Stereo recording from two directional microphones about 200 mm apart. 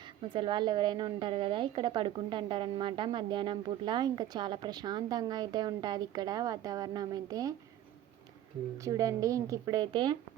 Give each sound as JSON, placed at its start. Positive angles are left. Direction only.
{"t": 0.2, "sound": "a woman's voice", "side_deg": -25}
{"t": 8.8, "sound": "speech", "side_deg": -15}